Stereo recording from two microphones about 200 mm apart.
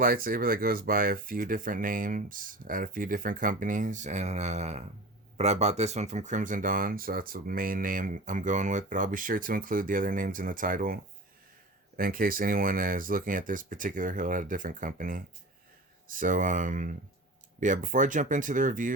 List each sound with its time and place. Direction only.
0.0 s speech: 45° right (ahead or behind)